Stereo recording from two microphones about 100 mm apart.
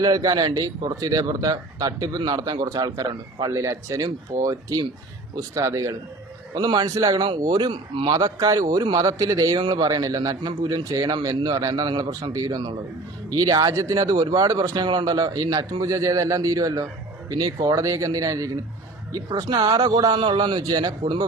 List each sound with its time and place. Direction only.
0.0 s speech: 40° right (ahead or behind)
7.7 s speech: 55° right (ahead or behind)
8.1 s a man's voice: 40° right (ahead or behind)